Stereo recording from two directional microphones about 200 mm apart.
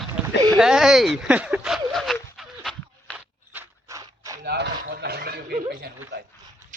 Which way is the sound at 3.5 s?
15° right (ahead or behind).